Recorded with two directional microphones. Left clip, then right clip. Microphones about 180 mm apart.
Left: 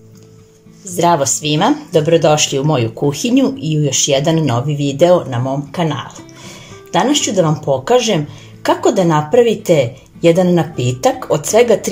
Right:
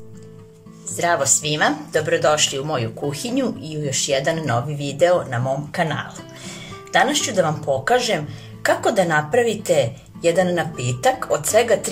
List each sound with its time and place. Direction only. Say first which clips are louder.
0.9 s speech: left 6 dB; 20° left (ahead or behind)